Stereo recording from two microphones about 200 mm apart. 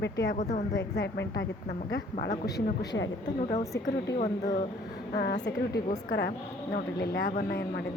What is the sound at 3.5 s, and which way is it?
Speech, 15° left (ahead or behind).